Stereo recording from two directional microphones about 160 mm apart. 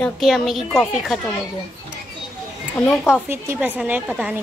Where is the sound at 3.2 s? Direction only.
15° right (ahead or behind).